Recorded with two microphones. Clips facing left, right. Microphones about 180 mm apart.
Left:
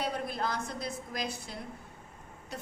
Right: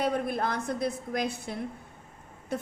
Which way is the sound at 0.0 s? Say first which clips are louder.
Right 5 dB; 55° right (ahead or behind).